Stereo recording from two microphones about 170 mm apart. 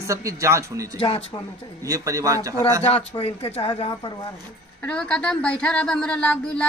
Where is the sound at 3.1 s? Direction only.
35° left (ahead or behind).